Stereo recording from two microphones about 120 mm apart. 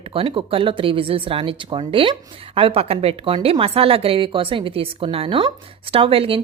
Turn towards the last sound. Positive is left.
turn(degrees=-50)  # may be behind; listen again after turning